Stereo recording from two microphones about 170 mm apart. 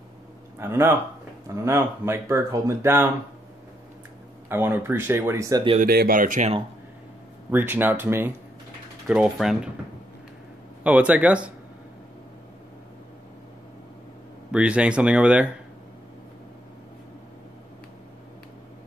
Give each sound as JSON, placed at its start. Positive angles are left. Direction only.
{"t": 0.6, "sound": "speech", "side_deg": -15}
{"t": 4.5, "sound": "speech", "side_deg": -15}
{"t": 5.8, "sound": "speech", "side_deg": -60}
{"t": 7.5, "sound": "speech", "side_deg": -10}
{"t": 10.8, "sound": "speech", "side_deg": -10}
{"t": 14.5, "sound": "speech", "side_deg": -5}